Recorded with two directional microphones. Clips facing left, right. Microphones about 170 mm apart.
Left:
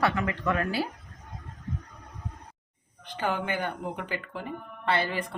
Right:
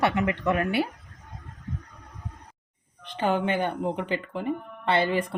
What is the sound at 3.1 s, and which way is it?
Speech, 20° right (ahead or behind).